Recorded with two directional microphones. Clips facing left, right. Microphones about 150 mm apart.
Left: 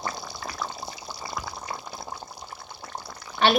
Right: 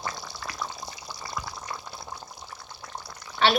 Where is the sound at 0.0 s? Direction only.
30° left (ahead or behind).